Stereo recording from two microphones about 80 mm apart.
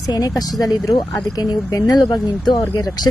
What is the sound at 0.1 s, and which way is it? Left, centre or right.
A woman's voice, left.